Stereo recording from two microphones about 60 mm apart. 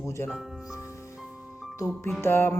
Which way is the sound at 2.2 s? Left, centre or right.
Left.